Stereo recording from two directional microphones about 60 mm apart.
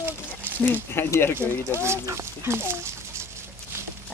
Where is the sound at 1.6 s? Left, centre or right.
Right.